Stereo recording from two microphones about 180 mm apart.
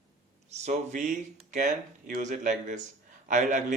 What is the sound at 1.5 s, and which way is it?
Mantra, 45° right (ahead or behind).